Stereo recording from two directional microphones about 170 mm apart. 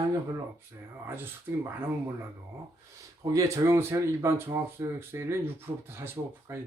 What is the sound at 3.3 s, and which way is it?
Speech, 20° right (ahead or behind).